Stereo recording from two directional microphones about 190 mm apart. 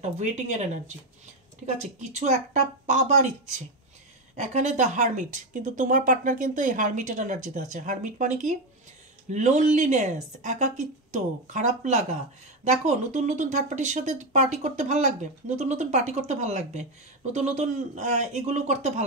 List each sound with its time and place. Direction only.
0.0 s speech: 35° right (ahead or behind)